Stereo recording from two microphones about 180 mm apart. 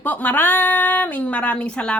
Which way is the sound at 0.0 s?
10° left (ahead or behind).